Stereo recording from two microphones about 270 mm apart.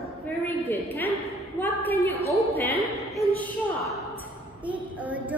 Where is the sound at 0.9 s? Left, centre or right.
Centre.